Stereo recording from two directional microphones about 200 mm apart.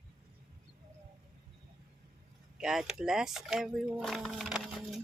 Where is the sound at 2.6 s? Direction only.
5° right (ahead or behind).